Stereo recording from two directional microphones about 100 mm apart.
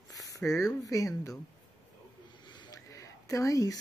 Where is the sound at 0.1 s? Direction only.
35° left (ahead or behind).